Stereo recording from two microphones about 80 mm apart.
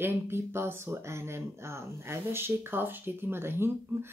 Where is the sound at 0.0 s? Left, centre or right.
Right.